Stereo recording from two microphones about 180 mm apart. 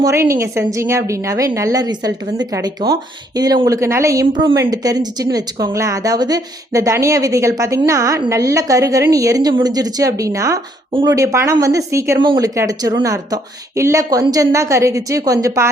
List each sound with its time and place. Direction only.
0.0 s a woman's voice: 15° right (ahead or behind)